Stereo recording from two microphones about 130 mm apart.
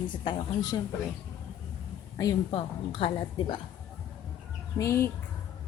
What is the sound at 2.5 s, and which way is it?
A woman's voice, 45° left (ahead or behind).